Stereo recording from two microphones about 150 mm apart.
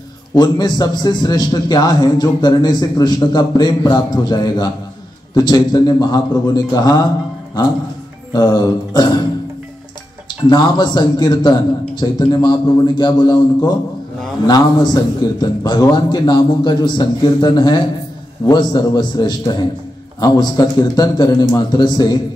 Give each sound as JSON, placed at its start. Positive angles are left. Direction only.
{"t": 0.3, "sound": "a man's voice", "side_deg": 25}
{"t": 8.3, "sound": "a man's voice", "side_deg": 25}
{"t": 10.5, "sound": "a man's voice", "side_deg": 30}